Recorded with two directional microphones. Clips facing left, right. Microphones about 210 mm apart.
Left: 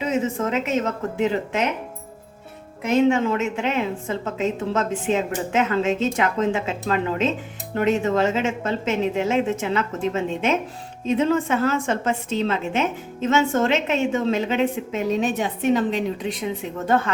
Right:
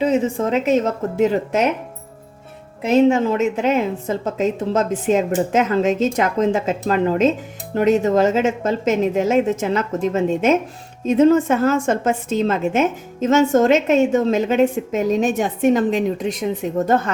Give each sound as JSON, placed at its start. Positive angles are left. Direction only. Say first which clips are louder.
{"t": 0.0, "sound": "a woman's voice", "louder": "right 5 dB", "side_deg": -35}
{"t": 2.8, "sound": "a woman's voice", "louder": "right 4 dB", "side_deg": -35}